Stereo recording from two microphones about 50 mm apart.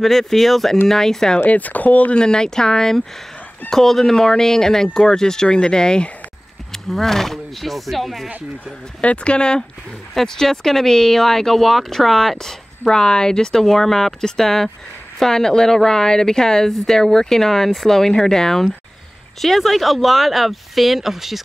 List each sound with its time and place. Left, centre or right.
0.0 s speech: centre
1.4 s speech: left
2.1 s speech: centre
9.0 s speech: left; by 21.4 s centre